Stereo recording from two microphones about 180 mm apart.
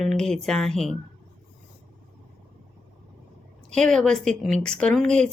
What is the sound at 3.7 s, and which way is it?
Speech, 5° left (ahead or behind).